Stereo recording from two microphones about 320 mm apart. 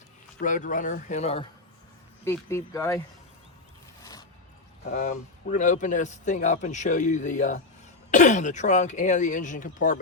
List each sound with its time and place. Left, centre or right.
0.3 s a man's voice: left
2.2 s speech: centre
4.0 s a sound: centre
4.9 s a man's voice: left